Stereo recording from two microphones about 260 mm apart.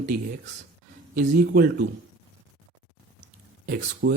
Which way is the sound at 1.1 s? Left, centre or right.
Right.